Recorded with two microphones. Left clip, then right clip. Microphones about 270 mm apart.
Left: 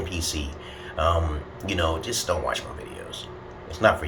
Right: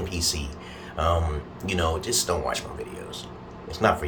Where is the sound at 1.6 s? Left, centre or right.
Centre.